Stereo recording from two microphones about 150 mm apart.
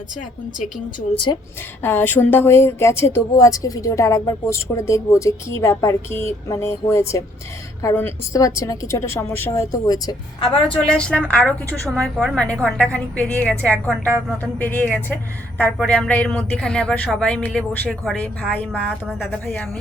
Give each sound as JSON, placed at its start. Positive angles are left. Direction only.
{"t": 0.2, "sound": "a woman's voice", "side_deg": 60}
{"t": 1.1, "sound": "a woman's voice", "side_deg": 35}
{"t": 1.8, "sound": "speech", "side_deg": 15}
{"t": 10.4, "sound": "a woman's voice", "side_deg": 35}
{"t": 10.8, "sound": "speech", "side_deg": 5}